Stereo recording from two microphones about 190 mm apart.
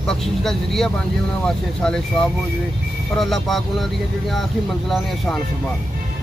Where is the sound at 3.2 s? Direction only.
Centre (ahead or behind).